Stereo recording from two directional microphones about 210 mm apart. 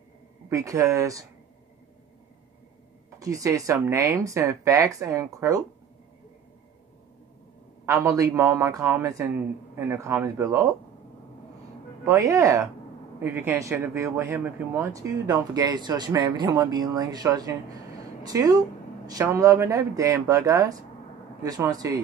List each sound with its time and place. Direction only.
0.5 s speech: 15° right (ahead or behind)
3.2 s speech: 15° right (ahead or behind)
7.8 s speech: 15° right (ahead or behind)
12.0 s speech: 15° right (ahead or behind)